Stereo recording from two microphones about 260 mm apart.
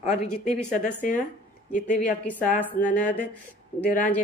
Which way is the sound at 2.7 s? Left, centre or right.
Left.